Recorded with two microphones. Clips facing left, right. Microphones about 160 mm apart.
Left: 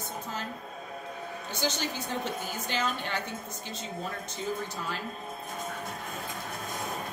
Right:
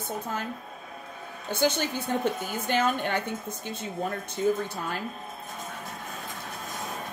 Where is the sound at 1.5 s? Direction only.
55° right (ahead or behind).